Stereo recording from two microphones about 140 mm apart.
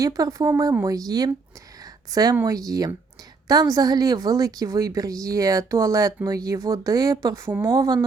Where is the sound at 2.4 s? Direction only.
25° right (ahead or behind).